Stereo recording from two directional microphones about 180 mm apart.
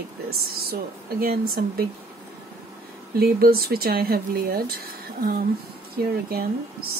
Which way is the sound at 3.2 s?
55° right (ahead or behind).